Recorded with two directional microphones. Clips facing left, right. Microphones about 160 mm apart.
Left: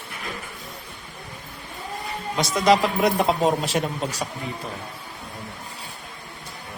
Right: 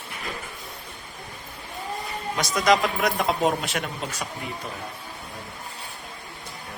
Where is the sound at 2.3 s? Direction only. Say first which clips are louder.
Left 2 dB; 30° left (ahead or behind).